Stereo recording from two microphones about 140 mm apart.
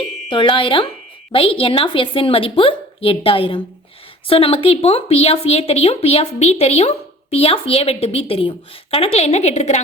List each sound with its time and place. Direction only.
0.3 s a woman's voice: 35° left (ahead or behind); by 9.8 s 55° left (ahead or behind)